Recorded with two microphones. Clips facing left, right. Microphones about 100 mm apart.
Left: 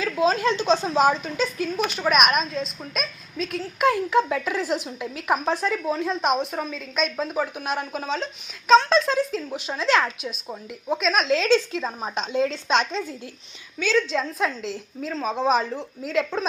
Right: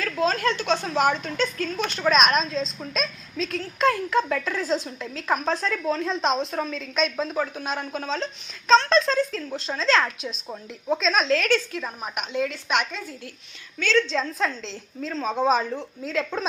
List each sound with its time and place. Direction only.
0.0 s a woman's voice: 15° left (ahead or behind)
10.0 s a woman's voice: 5° left (ahead or behind)
11.3 s a woman's voice: 20° left (ahead or behind)
13.7 s a woman's voice: 10° left (ahead or behind)